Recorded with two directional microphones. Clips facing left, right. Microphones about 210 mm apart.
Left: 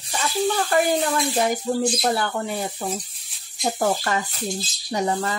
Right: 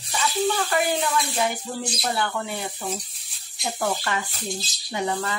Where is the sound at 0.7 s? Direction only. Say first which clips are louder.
Left 3 dB; 45° left (ahead or behind).